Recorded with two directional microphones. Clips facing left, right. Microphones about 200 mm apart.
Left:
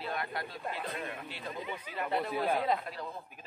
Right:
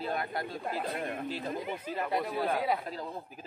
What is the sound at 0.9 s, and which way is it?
Speech, 50° right (ahead or behind).